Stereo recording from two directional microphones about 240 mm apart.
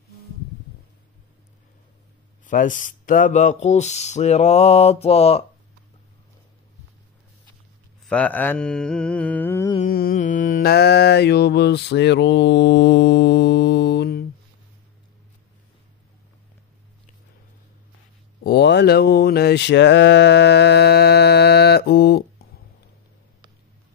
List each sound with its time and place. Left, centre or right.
2.4 s speech: left
8.0 s mantra: centre
9.8 s mantra: left
18.4 s mantra: left